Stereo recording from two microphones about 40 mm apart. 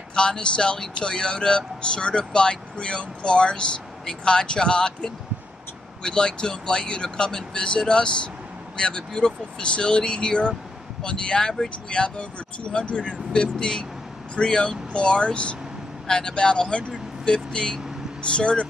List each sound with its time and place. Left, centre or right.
0.1 s speech: left